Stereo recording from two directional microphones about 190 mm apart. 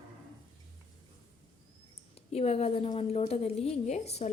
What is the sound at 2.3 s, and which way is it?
A woman's voice, 30° left (ahead or behind).